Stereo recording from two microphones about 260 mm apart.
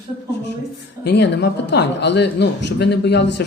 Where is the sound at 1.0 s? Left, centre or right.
Left.